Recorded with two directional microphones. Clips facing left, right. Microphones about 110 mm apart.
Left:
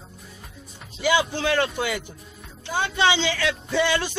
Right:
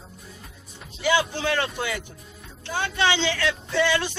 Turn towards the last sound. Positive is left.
turn(degrees=15)  # may be behind; listen again after turning